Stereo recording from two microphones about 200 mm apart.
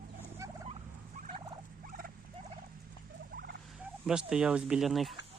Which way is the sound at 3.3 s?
55° right (ahead or behind).